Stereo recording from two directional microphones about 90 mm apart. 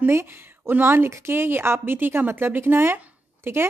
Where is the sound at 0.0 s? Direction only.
25° right (ahead or behind).